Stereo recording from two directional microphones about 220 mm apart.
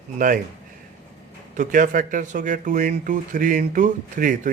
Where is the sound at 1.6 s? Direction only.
35° right (ahead or behind).